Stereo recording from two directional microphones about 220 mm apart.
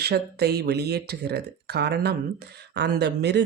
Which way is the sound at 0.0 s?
45° right (ahead or behind).